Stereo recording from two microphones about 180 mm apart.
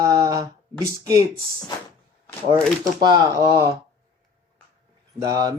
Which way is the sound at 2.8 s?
20° right (ahead or behind).